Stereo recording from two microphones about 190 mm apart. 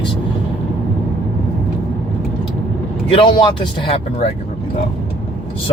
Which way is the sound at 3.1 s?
25° left (ahead or behind).